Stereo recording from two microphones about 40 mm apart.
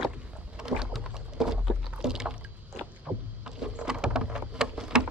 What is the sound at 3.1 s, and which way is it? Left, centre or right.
Rowboat, right.